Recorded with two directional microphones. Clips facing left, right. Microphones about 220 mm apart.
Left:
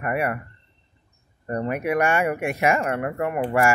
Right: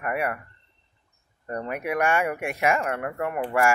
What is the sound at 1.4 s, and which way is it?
Speech, 5° left (ahead or behind).